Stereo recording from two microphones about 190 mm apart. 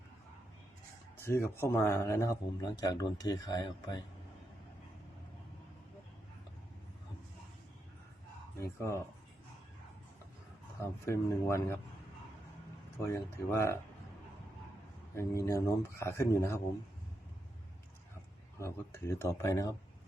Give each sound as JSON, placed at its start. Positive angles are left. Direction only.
{"t": 1.2, "sound": "speech", "side_deg": 15}
{"t": 8.6, "sound": "speech", "side_deg": 15}
{"t": 10.8, "sound": "speech", "side_deg": 15}
{"t": 13.1, "sound": "speech", "side_deg": 15}
{"t": 15.1, "sound": "speech", "side_deg": 15}
{"t": 18.6, "sound": "speech", "side_deg": 15}